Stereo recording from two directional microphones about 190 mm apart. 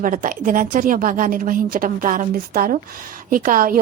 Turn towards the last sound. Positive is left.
turn(degrees=-45)  # may be behind; listen again after turning